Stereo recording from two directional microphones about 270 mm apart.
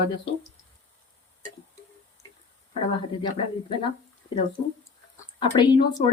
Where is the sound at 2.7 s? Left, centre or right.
Centre.